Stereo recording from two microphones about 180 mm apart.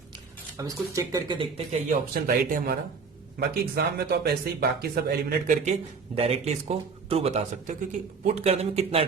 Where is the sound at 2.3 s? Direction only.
55° right (ahead or behind).